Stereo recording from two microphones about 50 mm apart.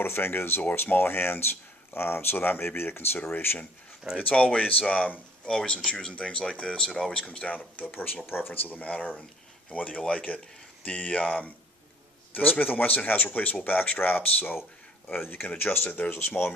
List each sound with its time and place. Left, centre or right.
0.0 s speech: left
4.3 s speech: left
5.5 s speech: centre
7.4 s speech: left
8.7 s speech: left